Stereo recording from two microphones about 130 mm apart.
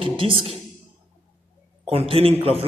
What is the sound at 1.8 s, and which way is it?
Speech, 50° right (ahead or behind).